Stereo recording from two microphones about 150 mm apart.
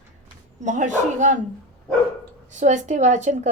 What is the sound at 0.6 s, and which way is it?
Speech, 55° right (ahead or behind).